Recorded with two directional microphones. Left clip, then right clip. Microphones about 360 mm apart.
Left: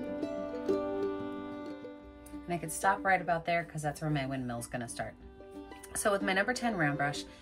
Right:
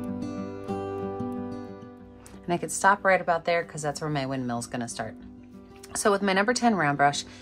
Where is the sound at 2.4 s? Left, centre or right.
Centre.